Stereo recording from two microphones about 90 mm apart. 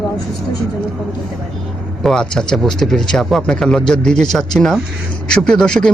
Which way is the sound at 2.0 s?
10° left (ahead or behind).